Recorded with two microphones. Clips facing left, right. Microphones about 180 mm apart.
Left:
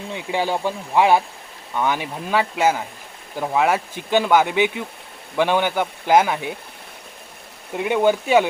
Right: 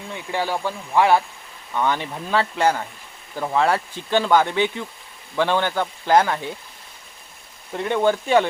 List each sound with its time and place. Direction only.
0.1 s speech: 15° left (ahead or behind)
7.8 s speech: 10° left (ahead or behind)